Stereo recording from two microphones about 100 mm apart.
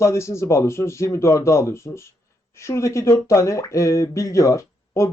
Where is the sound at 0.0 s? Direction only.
30° left (ahead or behind).